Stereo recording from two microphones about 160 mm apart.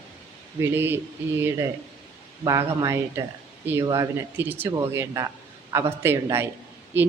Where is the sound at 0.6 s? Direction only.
15° right (ahead or behind).